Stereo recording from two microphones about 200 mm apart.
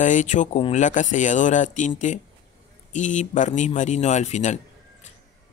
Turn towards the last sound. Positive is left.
turn(degrees=35)  # may be behind; listen again after turning